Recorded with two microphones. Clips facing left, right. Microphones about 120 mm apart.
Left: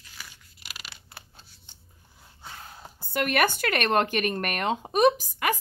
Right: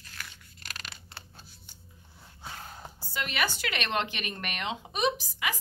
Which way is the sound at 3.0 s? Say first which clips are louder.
Left 8 dB; 55° left (ahead or behind).